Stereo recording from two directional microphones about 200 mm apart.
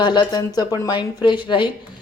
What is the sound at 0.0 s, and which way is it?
Speech, 20° left (ahead or behind).